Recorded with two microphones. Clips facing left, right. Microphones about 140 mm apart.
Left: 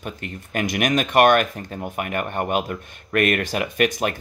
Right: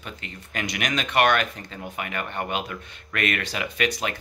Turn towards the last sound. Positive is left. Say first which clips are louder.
# left 5 dB
turn(degrees=50)  # may be behind; listen again after turning